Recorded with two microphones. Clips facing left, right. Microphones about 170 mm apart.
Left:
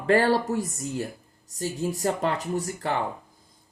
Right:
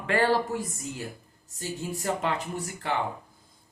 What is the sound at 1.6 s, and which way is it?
Speech, 40° left (ahead or behind).